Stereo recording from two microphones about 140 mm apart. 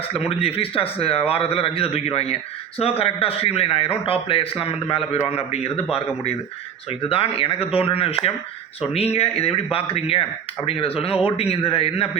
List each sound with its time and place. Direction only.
0.1 s a man's voice: 45° left (ahead or behind)
11.1 s speech: 10° right (ahead or behind)
11.3 s speech: 40° left (ahead or behind)